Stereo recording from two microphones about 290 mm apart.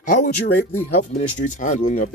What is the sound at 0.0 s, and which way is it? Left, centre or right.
Speech, left.